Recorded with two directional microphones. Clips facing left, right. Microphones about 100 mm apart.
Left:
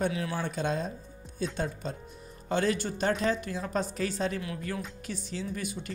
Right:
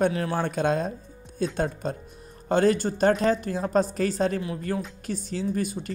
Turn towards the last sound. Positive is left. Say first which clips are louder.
# right 8 dB
turn(degrees=-40)  # may be behind; listen again after turning